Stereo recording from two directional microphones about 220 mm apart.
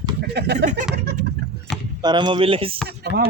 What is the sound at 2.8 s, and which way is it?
Speech, 50° right (ahead or behind).